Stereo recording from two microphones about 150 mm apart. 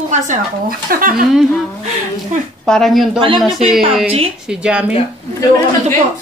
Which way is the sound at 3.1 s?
35° right (ahead or behind).